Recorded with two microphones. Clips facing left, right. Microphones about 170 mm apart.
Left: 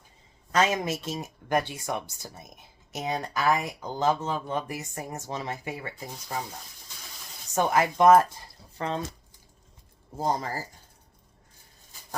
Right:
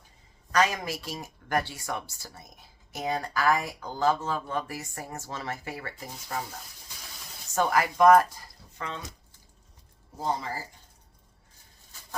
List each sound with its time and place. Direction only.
0.5 s speech: 25° left (ahead or behind)
7.5 s speech: 20° left (ahead or behind)
10.2 s speech: 40° left (ahead or behind)